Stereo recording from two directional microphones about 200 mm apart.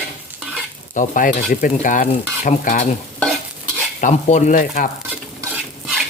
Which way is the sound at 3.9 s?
40° left (ahead or behind).